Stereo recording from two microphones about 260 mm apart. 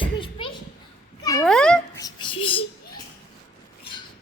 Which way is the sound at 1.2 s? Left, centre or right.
Centre.